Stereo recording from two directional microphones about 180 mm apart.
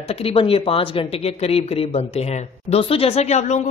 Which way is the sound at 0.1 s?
30° left (ahead or behind).